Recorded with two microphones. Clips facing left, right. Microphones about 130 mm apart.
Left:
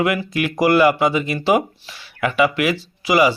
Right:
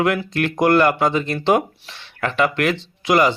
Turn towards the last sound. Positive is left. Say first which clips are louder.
# left 1 dB
turn(degrees=5)  # may be behind; listen again after turning